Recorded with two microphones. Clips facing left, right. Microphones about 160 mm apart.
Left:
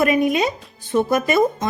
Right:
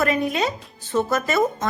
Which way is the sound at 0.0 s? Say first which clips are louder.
Left 4 dB; 15° left (ahead or behind).